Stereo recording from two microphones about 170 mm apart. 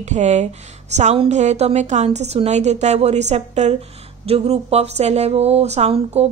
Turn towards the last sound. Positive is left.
turn(degrees=-40)  # may be behind; listen again after turning